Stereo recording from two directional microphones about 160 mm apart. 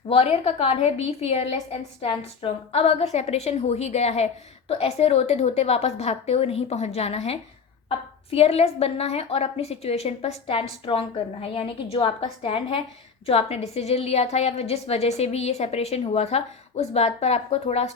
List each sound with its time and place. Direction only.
0.1 s a woman's voice: 40° left (ahead or behind)